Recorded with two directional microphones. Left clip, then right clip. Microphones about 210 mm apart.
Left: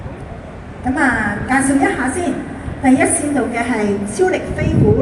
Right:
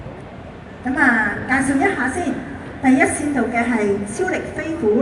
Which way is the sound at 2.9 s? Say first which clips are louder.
Left 2 dB; 50° left (ahead or behind).